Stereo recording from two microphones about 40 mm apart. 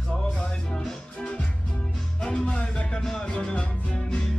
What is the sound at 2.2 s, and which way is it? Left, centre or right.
Music, left.